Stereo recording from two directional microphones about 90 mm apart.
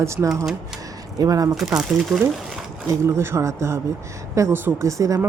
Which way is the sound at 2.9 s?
30° right (ahead or behind).